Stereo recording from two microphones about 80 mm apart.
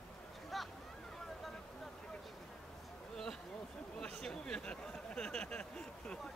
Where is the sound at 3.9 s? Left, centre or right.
Centre.